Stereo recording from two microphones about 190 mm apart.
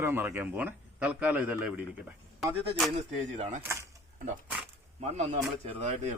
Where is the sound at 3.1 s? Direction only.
35° right (ahead or behind).